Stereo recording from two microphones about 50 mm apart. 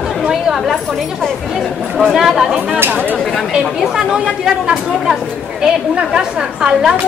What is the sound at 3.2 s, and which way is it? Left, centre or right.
Speech, centre.